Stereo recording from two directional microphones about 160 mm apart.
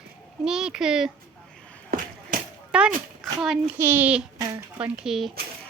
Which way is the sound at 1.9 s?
65° right (ahead or behind).